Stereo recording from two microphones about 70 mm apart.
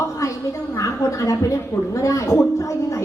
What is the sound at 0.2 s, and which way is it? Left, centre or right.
A woman's voice, left.